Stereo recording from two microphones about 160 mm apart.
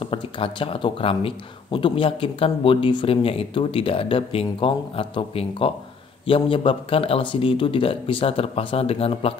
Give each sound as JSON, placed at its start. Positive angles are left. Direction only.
{"t": 0.0, "sound": "speech", "side_deg": 30}